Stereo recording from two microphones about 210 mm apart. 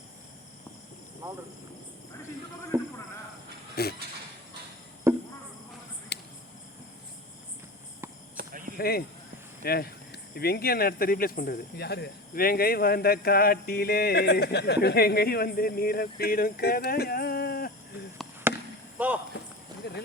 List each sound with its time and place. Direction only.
1.2 s speech: 20° right (ahead or behind)
2.7 s speech: 10° right (ahead or behind)
3.8 s speech: 45° left (ahead or behind)
5.1 s chop: 10° right (ahead or behind)
6.1 s a sound: 55° left (ahead or behind)
8.4 s cricket: 40° right (ahead or behind)
8.8 s speech: 45° left (ahead or behind)
18.5 s basketball bounce: 10° right (ahead or behind)
18.9 s cricket: 5° right (ahead or behind)